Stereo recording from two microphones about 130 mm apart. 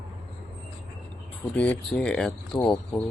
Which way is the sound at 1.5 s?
10° left (ahead or behind).